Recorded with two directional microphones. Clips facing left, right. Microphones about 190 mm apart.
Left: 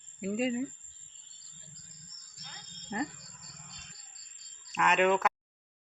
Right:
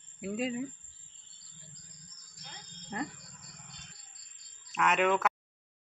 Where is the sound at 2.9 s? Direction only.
Centre (ahead or behind).